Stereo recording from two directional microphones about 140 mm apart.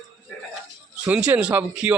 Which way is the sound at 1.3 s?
10° right (ahead or behind).